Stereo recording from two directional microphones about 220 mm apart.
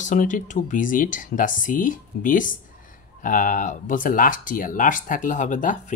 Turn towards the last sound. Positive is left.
turn(degrees=35)  # may be behind; listen again after turning